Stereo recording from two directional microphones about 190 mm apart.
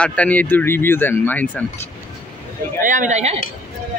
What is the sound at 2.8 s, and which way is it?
Speech, 40° right (ahead or behind).